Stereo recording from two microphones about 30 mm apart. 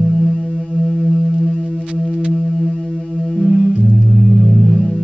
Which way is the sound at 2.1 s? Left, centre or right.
Right.